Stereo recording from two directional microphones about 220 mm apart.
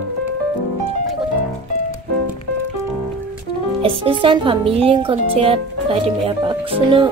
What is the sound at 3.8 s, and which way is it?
Speech, 25° right (ahead or behind).